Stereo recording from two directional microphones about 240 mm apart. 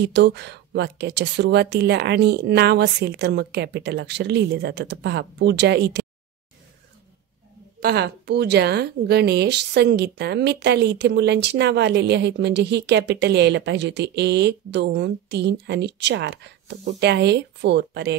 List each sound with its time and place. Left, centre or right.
0.0 s a woman's voice: right
7.8 s a woman's voice: right